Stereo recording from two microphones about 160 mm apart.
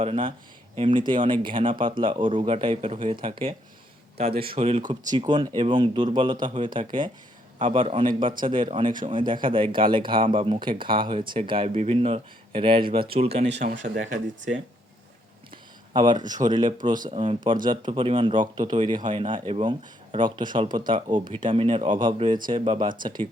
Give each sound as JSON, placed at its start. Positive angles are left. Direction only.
{"t": 0.0, "sound": "speech", "side_deg": -35}
{"t": 13.7, "sound": "speech", "side_deg": -60}
{"t": 15.9, "sound": "speech", "side_deg": -25}